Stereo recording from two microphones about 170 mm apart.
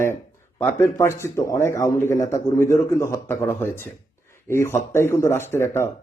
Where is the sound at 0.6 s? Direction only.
15° left (ahead or behind).